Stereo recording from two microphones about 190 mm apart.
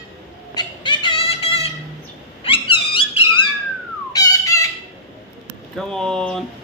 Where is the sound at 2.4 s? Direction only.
30° left (ahead or behind).